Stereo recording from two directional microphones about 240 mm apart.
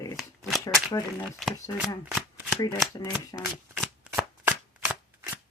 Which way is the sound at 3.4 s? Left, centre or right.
Centre.